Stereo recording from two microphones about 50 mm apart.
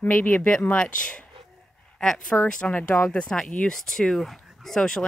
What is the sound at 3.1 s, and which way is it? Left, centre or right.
Speech, left.